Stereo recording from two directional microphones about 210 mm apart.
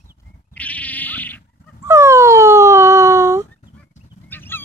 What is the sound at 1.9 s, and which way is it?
Dog, 15° right (ahead or behind).